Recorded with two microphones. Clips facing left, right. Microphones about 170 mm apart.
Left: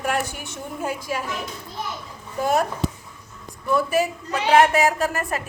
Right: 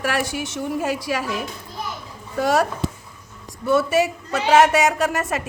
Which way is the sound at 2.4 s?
80° right.